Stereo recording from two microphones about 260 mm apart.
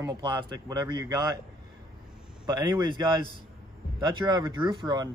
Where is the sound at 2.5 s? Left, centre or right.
Centre.